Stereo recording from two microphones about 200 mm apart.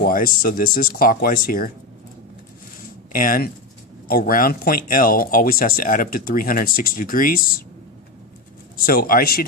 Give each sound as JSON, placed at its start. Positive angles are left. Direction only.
{"t": 0.0, "sound": "speech", "side_deg": 45}
{"t": 3.1, "sound": "speech", "side_deg": 45}
{"t": 8.7, "sound": "speech", "side_deg": 45}